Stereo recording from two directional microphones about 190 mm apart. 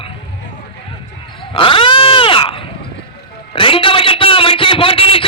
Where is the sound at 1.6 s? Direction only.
25° left (ahead or behind).